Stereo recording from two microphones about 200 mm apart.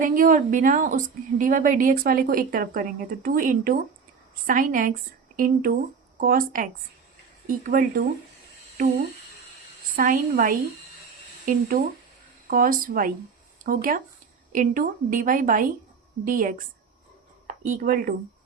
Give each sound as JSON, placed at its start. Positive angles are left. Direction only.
{"t": 0.0, "sound": "a woman's voice", "side_deg": -45}
{"t": 9.9, "sound": "a woman's voice", "side_deg": -45}
{"t": 12.5, "sound": "a woman's voice", "side_deg": -45}